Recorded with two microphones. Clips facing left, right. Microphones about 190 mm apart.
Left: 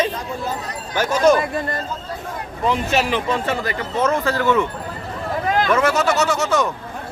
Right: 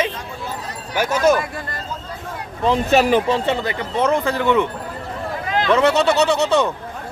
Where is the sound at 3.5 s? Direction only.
20° right (ahead or behind).